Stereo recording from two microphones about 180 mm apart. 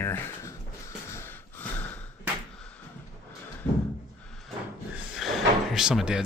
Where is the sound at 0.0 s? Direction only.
15° left (ahead or behind).